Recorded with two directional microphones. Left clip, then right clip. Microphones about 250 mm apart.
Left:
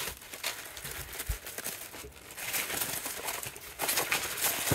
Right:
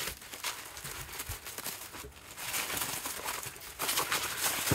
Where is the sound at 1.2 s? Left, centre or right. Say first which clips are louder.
Left 1 dB; centre.